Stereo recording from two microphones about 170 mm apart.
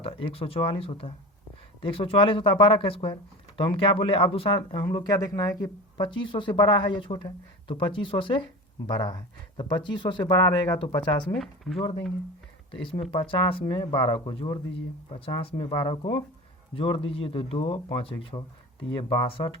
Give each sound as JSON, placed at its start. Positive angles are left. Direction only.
{"t": 0.0, "sound": "speech", "side_deg": 35}
{"t": 11.3, "sound": "speech", "side_deg": 0}
{"t": 12.8, "sound": "speech", "side_deg": 30}